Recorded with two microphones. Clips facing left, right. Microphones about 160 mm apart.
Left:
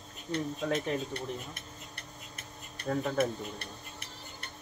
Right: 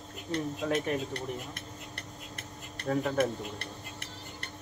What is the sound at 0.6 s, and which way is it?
Speech, 5° right (ahead or behind).